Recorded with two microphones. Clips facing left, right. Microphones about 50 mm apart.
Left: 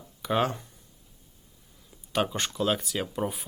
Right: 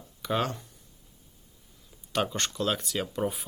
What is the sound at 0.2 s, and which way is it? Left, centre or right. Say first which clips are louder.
Speech: left 3 dB; centre.